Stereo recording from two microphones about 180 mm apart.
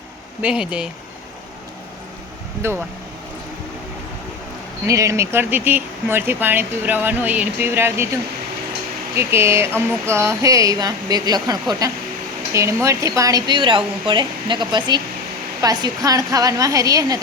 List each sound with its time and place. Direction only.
0.4 s speech: 5° right (ahead or behind)
2.6 s speech: 15° right (ahead or behind)
4.9 s speech: 15° right (ahead or behind)
9.1 s speech: 15° right (ahead or behind)